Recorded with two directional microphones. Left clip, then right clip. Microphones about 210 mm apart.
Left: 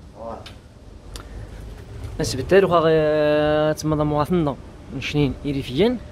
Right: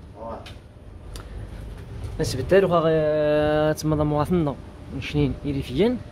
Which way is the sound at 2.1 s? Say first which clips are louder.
Left 2 dB; 10° left (ahead or behind).